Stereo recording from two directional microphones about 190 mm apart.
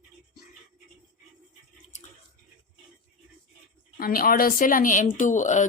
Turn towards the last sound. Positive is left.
turn(degrees=40)  # may be behind; listen again after turning